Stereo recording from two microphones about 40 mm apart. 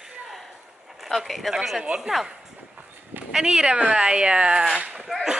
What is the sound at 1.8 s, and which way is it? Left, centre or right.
Speech, right.